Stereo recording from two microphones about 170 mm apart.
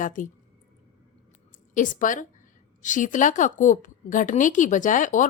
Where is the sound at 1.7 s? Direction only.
50° left (ahead or behind).